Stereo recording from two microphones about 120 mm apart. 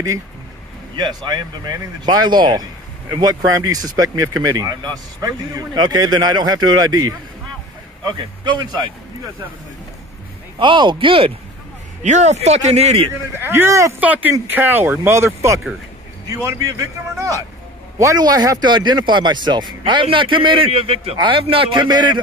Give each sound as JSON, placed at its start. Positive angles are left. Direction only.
{"t": 0.9, "sound": "a man's voice", "side_deg": -40}
{"t": 3.7, "sound": "a man's voice", "side_deg": -30}
{"t": 8.2, "sound": "a man's voice", "side_deg": -40}
{"t": 10.6, "sound": "speech", "side_deg": -40}
{"t": 12.0, "sound": "speech", "side_deg": -80}
{"t": 13.4, "sound": "speech", "side_deg": -20}
{"t": 14.0, "sound": "a man's voice", "side_deg": -15}